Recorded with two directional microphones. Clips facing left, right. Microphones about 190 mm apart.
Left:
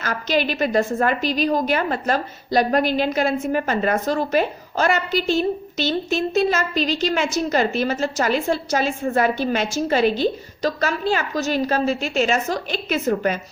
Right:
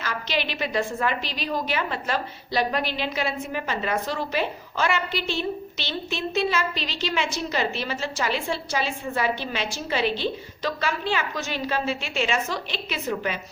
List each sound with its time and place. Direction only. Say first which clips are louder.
0.0 s a woman's voice: left 6 dB; 45° left (ahead or behind)